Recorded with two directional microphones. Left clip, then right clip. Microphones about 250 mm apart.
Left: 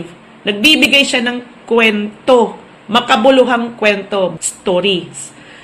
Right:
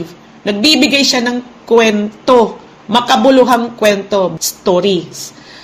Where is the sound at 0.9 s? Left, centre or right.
Right.